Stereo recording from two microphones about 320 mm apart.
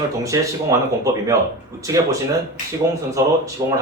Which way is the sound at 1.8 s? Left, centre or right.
Centre.